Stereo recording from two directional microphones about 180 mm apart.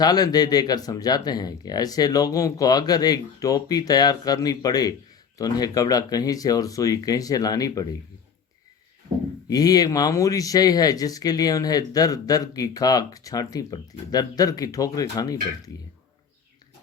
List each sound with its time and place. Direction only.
0.0 s speech: 20° left (ahead or behind)
9.5 s speech: 20° left (ahead or behind)